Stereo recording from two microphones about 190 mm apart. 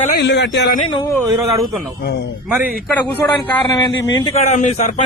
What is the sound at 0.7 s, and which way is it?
Speech, 25° left (ahead or behind).